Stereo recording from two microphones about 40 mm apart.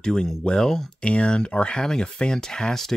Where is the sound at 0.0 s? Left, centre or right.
Centre.